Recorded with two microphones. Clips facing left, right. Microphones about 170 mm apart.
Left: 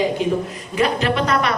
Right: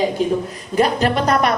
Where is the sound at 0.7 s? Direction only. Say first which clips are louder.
Right 3 dB; 40° right (ahead or behind).